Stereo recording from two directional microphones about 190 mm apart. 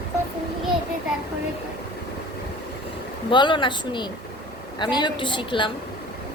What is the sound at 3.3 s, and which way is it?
A woman's voice, 25° left (ahead or behind).